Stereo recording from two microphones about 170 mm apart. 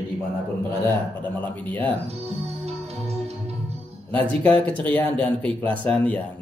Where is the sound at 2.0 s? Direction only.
35° right (ahead or behind).